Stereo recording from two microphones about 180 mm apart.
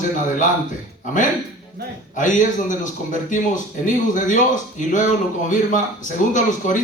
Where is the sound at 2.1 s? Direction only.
45° left (ahead or behind).